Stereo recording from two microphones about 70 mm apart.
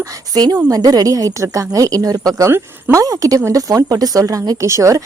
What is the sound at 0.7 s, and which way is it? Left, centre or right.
A woman's voice, right.